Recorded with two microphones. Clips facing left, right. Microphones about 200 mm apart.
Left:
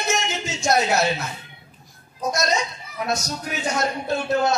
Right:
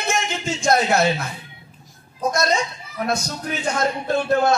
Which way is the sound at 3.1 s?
55° right (ahead or behind).